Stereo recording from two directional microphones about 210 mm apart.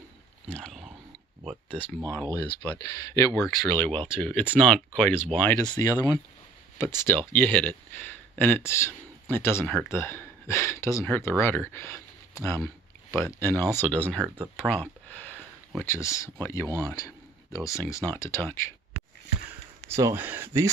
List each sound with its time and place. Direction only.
0.5 s a sound: 5° left (ahead or behind)
2.6 s speech: 15° left (ahead or behind)
3.9 s speech: 25° right (ahead or behind)
4.2 s speech: 5° left (ahead or behind)
14.2 s speech: 10° right (ahead or behind)
14.7 s a sound: 10° left (ahead or behind)
16.7 s speech: 15° left (ahead or behind)
19.9 s speech: 15° right (ahead or behind)